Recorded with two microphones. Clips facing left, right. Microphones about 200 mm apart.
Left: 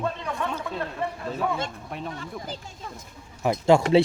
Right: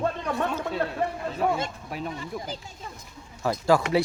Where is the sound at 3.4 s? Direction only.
20° left (ahead or behind).